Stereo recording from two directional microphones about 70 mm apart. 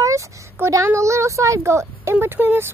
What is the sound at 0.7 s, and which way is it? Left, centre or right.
A woman's voice, right.